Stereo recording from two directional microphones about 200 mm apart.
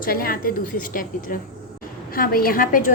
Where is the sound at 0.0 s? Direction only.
45° left (ahead or behind).